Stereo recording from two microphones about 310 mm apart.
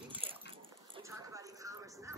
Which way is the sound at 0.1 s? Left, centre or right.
Centre.